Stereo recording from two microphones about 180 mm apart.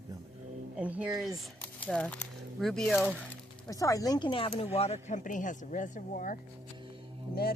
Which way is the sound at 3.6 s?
20° left (ahead or behind).